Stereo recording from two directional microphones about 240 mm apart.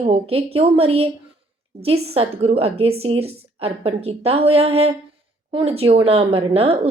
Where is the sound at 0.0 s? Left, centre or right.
Right.